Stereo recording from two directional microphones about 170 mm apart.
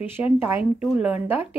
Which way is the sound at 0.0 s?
10° right (ahead or behind).